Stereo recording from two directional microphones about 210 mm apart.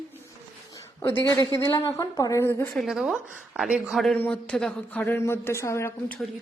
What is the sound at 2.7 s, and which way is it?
Speech, centre (ahead or behind).